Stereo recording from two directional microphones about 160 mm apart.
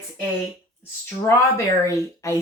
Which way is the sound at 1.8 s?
20° left (ahead or behind).